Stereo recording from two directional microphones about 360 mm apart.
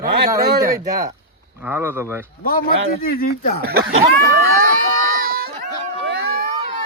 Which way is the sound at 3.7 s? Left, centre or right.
Right.